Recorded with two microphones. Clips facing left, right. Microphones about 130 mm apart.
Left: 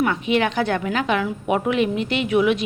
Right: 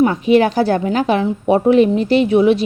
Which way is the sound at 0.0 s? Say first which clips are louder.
Right 8 dB; 35° right (ahead or behind).